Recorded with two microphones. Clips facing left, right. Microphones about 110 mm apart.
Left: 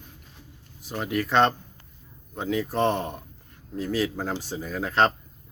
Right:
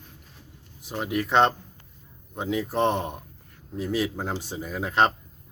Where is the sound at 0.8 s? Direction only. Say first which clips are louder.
Even; 20° right (ahead or behind).